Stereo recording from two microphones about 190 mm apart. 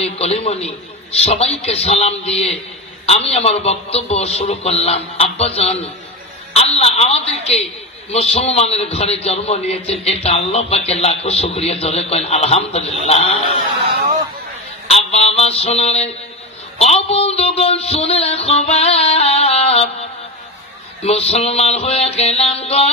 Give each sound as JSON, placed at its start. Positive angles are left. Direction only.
{"t": 0.0, "sound": "a man's voice", "side_deg": 35}
{"t": 15.0, "sound": "mantra", "side_deg": 30}
{"t": 16.7, "sound": "a man's voice", "side_deg": 30}